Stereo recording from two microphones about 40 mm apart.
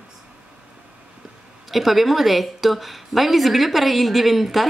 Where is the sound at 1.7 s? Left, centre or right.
Centre.